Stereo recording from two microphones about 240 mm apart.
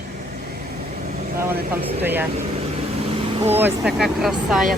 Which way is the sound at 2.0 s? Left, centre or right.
Centre.